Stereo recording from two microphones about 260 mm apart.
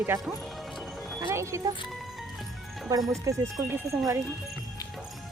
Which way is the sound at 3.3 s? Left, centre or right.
Centre.